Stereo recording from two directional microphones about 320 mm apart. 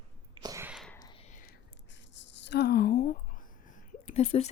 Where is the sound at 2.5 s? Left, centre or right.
Left.